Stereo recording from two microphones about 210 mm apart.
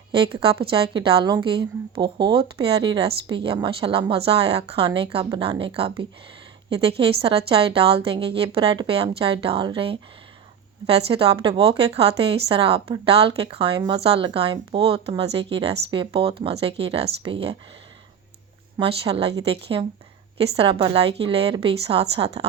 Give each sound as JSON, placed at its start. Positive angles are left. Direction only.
{"t": 0.7, "sound": "a woman's voice", "side_deg": -25}
{"t": 7.0, "sound": "a woman's voice", "side_deg": -25}
{"t": 18.8, "sound": "a woman's voice", "side_deg": -25}